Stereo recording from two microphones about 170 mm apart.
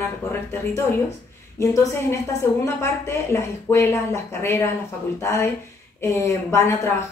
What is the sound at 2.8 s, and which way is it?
Speech, 15° left (ahead or behind).